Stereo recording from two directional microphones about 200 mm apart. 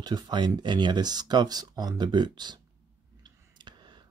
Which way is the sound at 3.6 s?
20° right (ahead or behind).